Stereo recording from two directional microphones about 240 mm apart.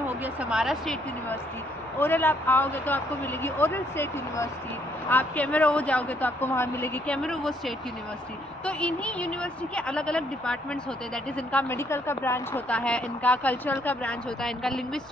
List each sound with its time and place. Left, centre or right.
0.2 s speech: centre
2.0 s a woman's voice: centre